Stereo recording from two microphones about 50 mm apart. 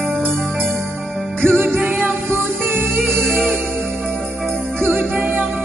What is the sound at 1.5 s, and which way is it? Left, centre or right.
Music, right.